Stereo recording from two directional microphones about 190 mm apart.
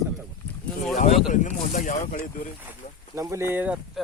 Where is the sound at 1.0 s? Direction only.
40° left (ahead or behind).